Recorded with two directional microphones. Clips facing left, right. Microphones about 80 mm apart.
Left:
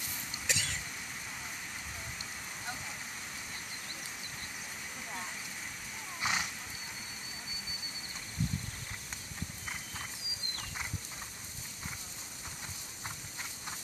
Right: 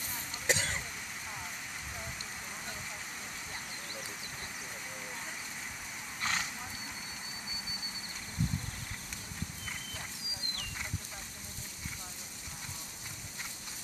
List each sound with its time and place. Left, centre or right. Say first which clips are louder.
0.5 s throat clearing: right 5 dB; right
6.2 s roaring cats: left 1 dB; centre